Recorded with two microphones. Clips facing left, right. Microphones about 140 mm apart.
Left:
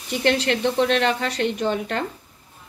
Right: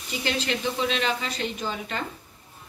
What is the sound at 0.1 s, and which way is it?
A woman's voice, 65° left (ahead or behind).